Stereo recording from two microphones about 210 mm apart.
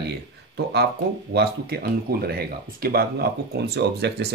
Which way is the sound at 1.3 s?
50° right (ahead or behind).